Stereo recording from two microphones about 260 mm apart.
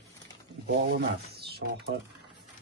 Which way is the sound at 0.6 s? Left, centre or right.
Right.